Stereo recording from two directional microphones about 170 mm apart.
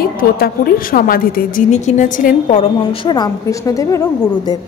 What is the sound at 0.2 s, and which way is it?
A woman's voice, 55° left (ahead or behind).